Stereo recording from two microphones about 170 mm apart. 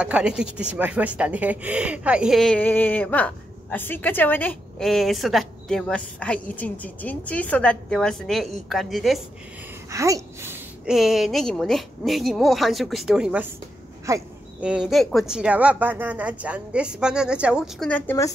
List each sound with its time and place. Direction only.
0.0 s speech: 5° right (ahead or behind)
9.8 s speech: 20° right (ahead or behind)
10.9 s speech: centre (ahead or behind)
14.1 s speech: 20° right (ahead or behind)
14.6 s speech: 5° right (ahead or behind)
17.8 s speech: 10° left (ahead or behind)